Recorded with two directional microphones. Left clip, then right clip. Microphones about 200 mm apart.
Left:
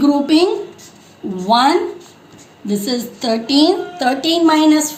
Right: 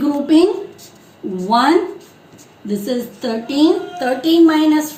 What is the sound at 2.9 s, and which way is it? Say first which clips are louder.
A woman's voice: left 2 dB; 45° left (ahead or behind).